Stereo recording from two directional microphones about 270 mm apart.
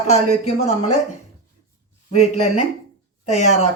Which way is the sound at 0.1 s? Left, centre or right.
Left.